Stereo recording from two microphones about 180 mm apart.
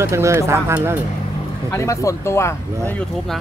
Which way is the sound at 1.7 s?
15° left (ahead or behind).